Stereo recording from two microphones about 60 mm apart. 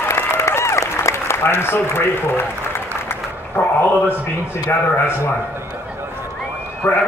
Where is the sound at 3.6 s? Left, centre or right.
Left.